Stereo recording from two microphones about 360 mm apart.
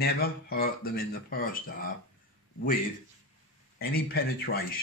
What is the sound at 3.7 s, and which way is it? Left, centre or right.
Speech, left.